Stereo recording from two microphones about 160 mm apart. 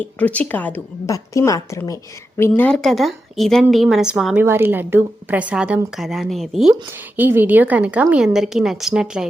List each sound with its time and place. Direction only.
0.0 s a woman's voice: 10° left (ahead or behind)
2.4 s a woman's voice: 10° left (ahead or behind)
7.2 s a woman's voice: 10° right (ahead or behind)